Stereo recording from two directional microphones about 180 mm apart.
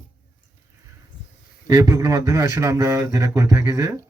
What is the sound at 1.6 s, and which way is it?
Speech, 20° right (ahead or behind).